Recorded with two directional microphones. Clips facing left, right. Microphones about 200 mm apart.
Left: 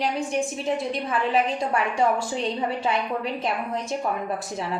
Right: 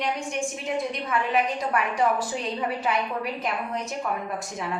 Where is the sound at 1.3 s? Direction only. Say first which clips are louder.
Left 2 dB; 30° left (ahead or behind).